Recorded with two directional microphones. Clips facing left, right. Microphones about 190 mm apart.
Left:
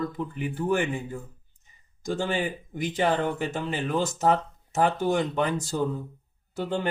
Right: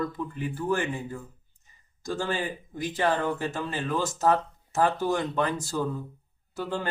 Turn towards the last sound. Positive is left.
turn(degrees=20)  # may be behind; listen again after turning